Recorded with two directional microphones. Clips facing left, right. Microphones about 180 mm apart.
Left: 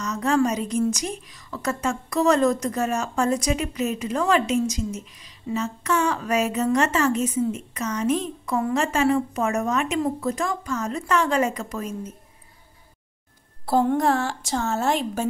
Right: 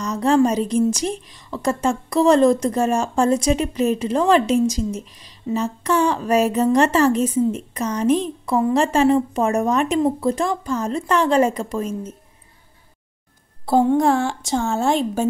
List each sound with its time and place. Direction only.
0.0 s a woman's voice: 30° right (ahead or behind)
13.7 s a woman's voice: 20° right (ahead or behind)